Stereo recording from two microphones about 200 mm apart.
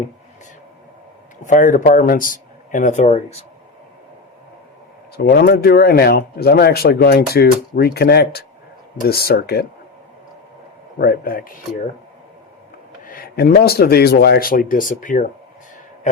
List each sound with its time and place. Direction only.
1.5 s speech: 40° left (ahead or behind)
5.1 s speech: 55° left (ahead or behind)
10.9 s speech: 50° left (ahead or behind)
13.1 s speech: 45° left (ahead or behind)